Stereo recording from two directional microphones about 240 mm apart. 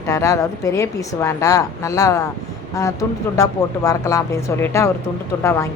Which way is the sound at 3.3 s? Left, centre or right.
Centre.